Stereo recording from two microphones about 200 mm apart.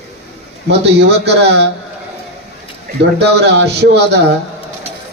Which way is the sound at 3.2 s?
55° right (ahead or behind).